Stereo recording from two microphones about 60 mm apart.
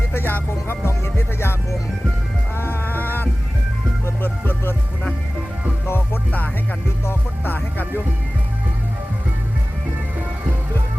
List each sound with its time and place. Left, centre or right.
0.1 s music: left
2.6 s music: left
5.8 s music: left